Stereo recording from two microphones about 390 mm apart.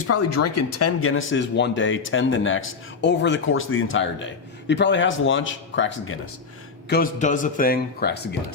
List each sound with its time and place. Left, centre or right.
0.0 s speech: left